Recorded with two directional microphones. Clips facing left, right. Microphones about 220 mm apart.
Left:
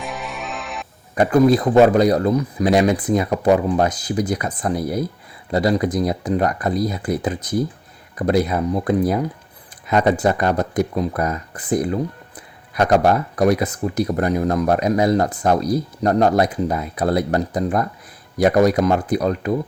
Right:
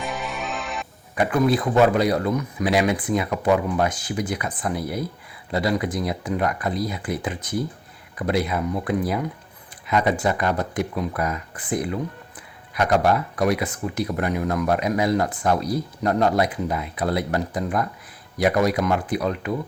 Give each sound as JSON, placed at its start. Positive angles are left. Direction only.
{"t": 0.0, "sound": "music", "side_deg": 0}
{"t": 1.1, "sound": "speech", "side_deg": 40}